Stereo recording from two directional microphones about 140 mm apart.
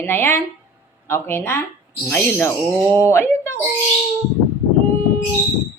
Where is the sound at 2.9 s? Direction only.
20° left (ahead or behind).